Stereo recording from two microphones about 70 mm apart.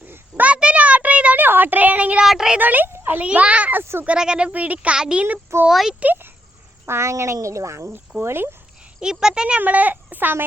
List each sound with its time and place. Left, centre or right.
0.1 s a sound: right
2.2 s speech: centre
2.6 s speech: right
2.9 s a sound: right
3.2 s speech: centre
5.6 s speech: centre
6.8 s a woman's voice: right
8.2 s speech: right
9.0 s speech: centre
9.6 s speech: right